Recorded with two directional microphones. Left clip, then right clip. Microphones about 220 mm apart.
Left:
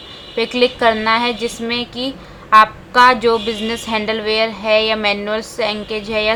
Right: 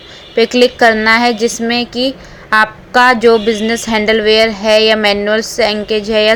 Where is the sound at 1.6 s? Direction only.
20° right (ahead or behind).